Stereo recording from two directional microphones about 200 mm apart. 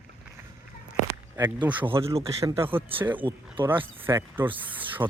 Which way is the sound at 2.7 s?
25° right (ahead or behind).